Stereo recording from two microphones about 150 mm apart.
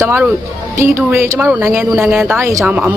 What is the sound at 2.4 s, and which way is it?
Speech, 20° right (ahead or behind).